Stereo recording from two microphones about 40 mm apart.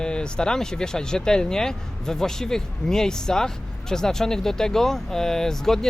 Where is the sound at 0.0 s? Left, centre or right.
Left.